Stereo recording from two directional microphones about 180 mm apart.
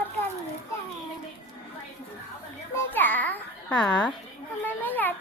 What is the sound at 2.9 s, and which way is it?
Babbling, 10° left (ahead or behind).